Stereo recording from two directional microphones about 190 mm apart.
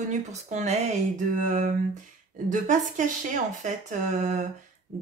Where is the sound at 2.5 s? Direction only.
40° right (ahead or behind).